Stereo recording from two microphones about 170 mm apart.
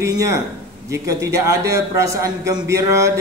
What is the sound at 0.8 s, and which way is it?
A man's voice, 20° right (ahead or behind).